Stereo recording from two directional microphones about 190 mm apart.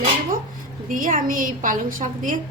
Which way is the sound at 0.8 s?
45° right (ahead or behind).